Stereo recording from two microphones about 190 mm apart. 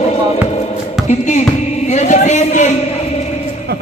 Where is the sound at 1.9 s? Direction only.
40° left (ahead or behind).